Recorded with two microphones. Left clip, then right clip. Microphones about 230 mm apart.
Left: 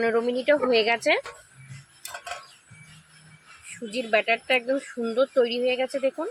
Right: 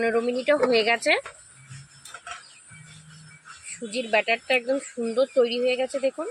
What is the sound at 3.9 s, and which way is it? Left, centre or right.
Speech, centre.